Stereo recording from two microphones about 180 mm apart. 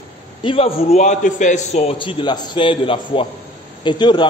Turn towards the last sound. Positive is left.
turn(degrees=25)  # may be behind; listen again after turning